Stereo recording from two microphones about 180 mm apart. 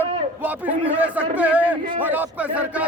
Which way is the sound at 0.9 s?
10° right (ahead or behind).